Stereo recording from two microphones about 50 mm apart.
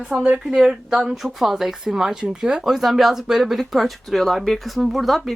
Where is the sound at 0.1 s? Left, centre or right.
Centre.